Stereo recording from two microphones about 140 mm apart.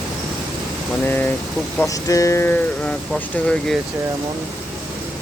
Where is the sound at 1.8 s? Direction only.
25° left (ahead or behind); by 3.8 s 5° left (ahead or behind).